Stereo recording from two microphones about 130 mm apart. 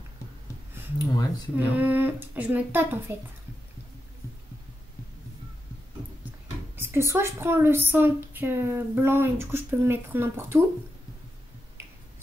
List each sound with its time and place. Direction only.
0.9 s speech: 30° left (ahead or behind)
1.6 s a woman's voice: 15° right (ahead or behind)
6.8 s a woman's voice: 20° right (ahead or behind)